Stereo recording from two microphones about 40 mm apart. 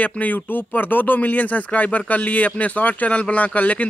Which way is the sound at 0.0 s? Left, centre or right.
Left.